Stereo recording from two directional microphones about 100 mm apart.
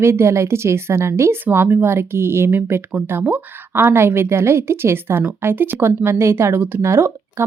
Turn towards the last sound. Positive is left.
turn(degrees=-25)  # may be behind; listen again after turning